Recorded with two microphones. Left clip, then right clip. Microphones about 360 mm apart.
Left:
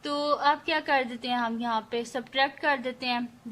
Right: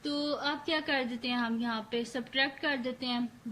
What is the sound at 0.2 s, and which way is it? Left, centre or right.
A woman's voice, centre.